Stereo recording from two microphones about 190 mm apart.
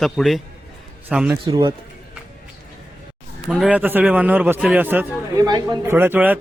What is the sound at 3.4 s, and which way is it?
A man's voice, 5° right (ahead or behind).